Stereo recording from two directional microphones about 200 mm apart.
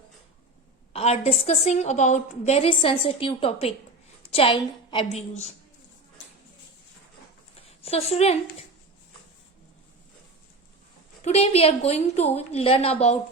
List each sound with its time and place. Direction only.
0.9 s a woman's voice: 30° left (ahead or behind)
7.8 s a woman's voice: 30° left (ahead or behind)
11.2 s a woman's voice: 30° left (ahead or behind)